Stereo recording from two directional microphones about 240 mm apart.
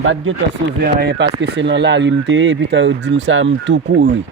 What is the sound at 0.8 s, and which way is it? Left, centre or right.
Speech, right.